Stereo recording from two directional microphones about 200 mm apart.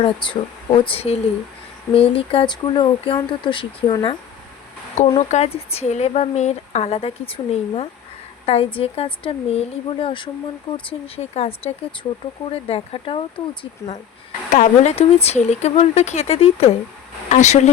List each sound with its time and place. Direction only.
0.0 s speech: 25° left (ahead or behind)
5.3 s speech: 30° left (ahead or behind)
14.5 s speech: 35° left (ahead or behind)